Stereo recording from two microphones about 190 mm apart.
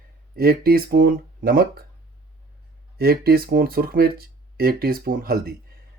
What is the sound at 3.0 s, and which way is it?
Speech, 55° right (ahead or behind).